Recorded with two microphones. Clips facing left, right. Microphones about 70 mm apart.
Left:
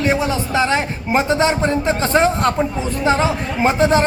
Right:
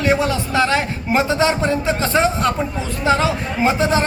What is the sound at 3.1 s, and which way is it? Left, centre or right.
Speech, left.